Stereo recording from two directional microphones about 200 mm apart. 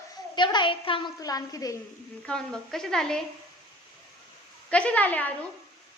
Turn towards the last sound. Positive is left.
turn(degrees=10)  # may be behind; listen again after turning